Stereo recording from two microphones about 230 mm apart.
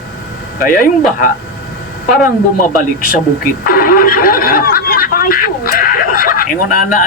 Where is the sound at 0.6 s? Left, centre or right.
Left.